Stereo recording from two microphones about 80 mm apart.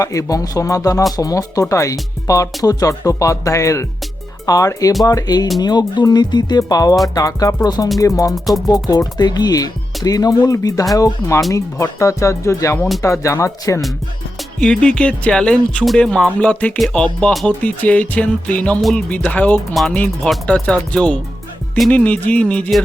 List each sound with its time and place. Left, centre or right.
0.0 s speech: left
8.3 s music: centre
8.7 s speech: left
14.6 s speech: centre
18.8 s music: centre
19.1 s speech: centre